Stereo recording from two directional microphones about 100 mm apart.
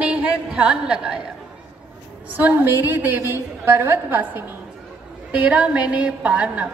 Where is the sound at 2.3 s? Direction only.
20° right (ahead or behind).